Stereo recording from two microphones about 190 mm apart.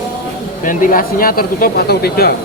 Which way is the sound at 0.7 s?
45° left (ahead or behind).